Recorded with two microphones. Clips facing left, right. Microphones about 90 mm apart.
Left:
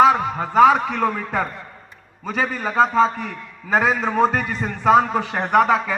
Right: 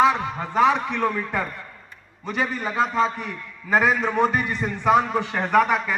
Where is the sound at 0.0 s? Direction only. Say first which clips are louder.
Left 4 dB; 35° left (ahead or behind).